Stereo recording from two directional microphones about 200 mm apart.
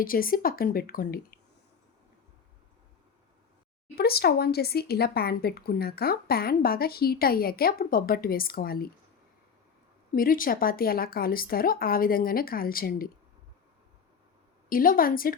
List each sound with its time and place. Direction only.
0.0 s speech: 45° left (ahead or behind)
3.9 s speech: 50° left (ahead or behind)
10.2 s speech: 45° left (ahead or behind)
14.7 s speech: 45° left (ahead or behind)